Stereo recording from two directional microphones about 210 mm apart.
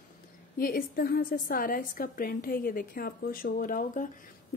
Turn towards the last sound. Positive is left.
turn(degrees=40)  # may be behind; listen again after turning